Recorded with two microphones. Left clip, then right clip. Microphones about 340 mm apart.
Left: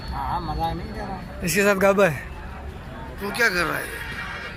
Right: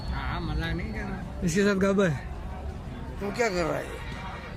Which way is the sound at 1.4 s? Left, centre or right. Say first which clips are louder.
Left 7 dB; centre.